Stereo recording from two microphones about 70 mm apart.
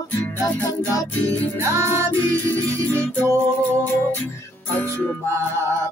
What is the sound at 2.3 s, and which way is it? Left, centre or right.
Music, left.